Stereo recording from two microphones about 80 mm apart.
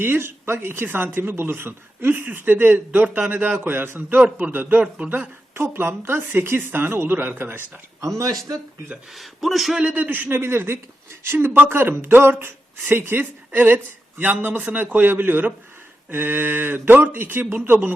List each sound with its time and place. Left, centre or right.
0.0 s a man's voice: right
5.5 s speech: right
8.0 s speech: right
9.1 s a man's voice: centre
9.8 s speech: centre